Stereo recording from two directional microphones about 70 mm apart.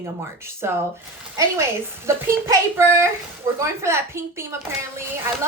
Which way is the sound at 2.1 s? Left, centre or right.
Right.